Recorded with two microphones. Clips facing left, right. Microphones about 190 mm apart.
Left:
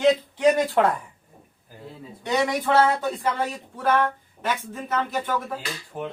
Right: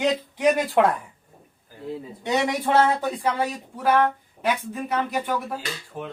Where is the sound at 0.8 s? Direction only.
10° right (ahead or behind).